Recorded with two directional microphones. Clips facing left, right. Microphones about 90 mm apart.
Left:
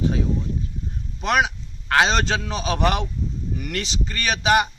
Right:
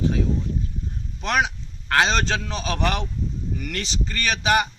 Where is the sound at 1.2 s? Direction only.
10° left (ahead or behind).